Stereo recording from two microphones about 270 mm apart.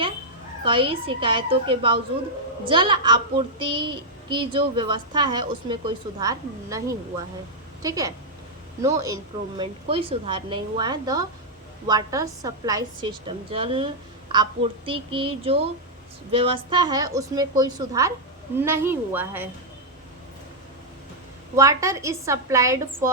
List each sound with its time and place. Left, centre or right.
0.6 s a woman's voice: centre
21.5 s a woman's voice: centre